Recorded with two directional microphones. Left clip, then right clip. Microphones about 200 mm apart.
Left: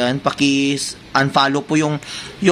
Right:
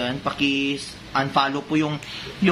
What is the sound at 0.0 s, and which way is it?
Speech, 50° left (ahead or behind).